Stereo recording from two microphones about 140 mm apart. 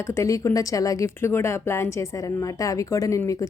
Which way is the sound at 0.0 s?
20° left (ahead or behind).